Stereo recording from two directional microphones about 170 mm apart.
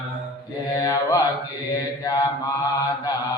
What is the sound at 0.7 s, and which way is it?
Mantra, 20° left (ahead or behind).